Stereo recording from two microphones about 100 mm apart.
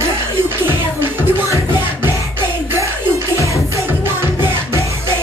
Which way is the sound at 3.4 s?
30° left (ahead or behind).